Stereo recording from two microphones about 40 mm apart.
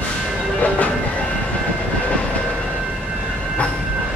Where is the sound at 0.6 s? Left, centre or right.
Left.